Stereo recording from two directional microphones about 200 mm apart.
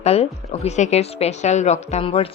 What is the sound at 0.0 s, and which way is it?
Speech, 30° left (ahead or behind).